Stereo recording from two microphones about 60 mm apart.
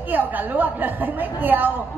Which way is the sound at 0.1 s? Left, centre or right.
Right.